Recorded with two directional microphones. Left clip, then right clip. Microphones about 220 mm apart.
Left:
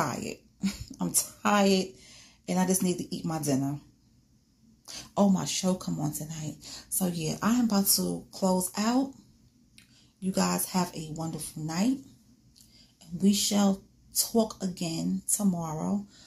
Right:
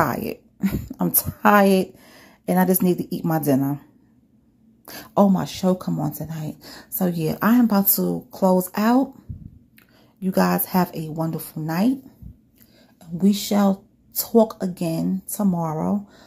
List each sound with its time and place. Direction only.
0.0 s speech: 30° right (ahead or behind)
4.8 s speech: 35° right (ahead or behind)
10.2 s speech: 30° right (ahead or behind)
13.2 s speech: 30° right (ahead or behind)